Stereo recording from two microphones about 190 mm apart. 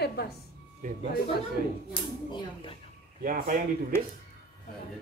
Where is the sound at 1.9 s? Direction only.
25° left (ahead or behind).